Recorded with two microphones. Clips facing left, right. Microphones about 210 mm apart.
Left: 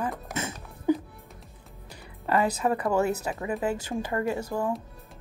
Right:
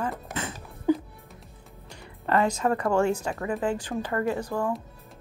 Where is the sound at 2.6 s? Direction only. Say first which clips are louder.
Right 1 dB; 10° left (ahead or behind).